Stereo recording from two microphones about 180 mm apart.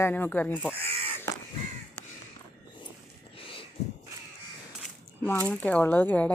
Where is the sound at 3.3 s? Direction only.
30° left (ahead or behind).